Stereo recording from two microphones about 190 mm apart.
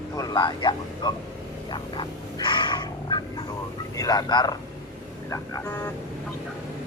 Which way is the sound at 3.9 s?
20° left (ahead or behind).